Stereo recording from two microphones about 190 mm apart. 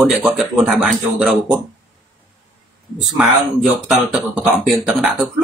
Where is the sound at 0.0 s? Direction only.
Centre (ahead or behind).